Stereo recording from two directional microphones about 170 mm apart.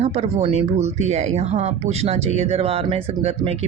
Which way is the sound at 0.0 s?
40° right (ahead or behind).